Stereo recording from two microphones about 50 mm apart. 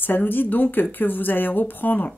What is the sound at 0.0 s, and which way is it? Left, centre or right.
Speech, left.